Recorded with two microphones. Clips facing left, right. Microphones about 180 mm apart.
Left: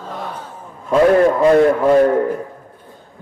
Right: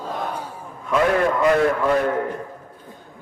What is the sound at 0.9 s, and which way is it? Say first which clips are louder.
A man's voice: left 7 dB; 30° left (ahead or behind).